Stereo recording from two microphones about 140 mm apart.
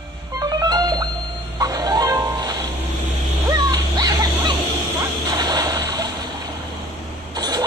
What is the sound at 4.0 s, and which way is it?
Music, 25° right (ahead or behind).